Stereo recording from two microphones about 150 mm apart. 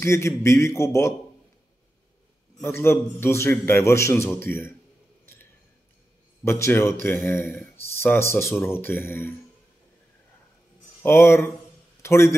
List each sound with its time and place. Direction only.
0.0 s a man's voice: 20° left (ahead or behind)
2.6 s a man's voice: 15° left (ahead or behind)
5.2 s a sound: 15° left (ahead or behind)
6.4 s a man's voice: 15° left (ahead or behind)
11.0 s a man's voice: 15° left (ahead or behind)